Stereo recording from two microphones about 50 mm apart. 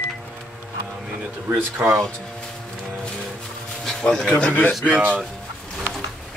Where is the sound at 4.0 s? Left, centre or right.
Centre.